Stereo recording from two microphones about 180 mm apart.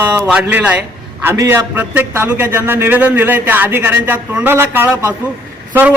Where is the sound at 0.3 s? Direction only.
10° right (ahead or behind).